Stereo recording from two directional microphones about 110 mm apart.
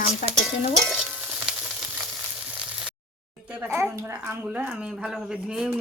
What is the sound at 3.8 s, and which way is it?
Speech, 25° right (ahead or behind).